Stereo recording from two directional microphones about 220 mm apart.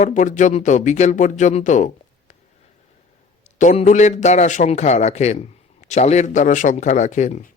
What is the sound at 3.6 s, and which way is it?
A man's voice, 35° left (ahead or behind).